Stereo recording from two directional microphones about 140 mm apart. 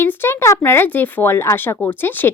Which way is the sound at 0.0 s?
15° left (ahead or behind).